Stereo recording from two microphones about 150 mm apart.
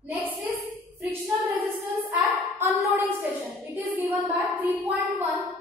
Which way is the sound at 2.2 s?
20° right (ahead or behind).